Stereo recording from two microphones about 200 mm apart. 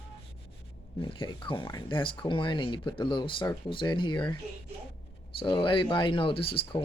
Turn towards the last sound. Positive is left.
turn(degrees=25)  # may be behind; listen again after turning